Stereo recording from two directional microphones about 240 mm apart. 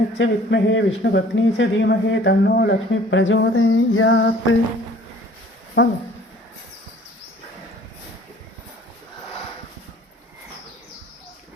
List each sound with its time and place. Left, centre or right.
0.2 s a man's voice: left
5.8 s a man's voice: left